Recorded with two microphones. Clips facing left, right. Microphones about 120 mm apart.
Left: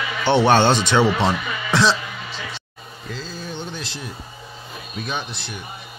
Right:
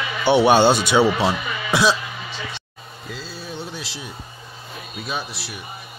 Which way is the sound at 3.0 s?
5° right (ahead or behind).